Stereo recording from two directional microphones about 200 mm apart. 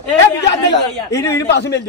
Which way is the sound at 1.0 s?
15° left (ahead or behind).